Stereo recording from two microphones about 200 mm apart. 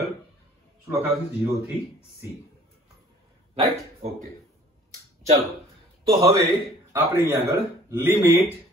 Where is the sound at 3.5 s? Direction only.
35° right (ahead or behind).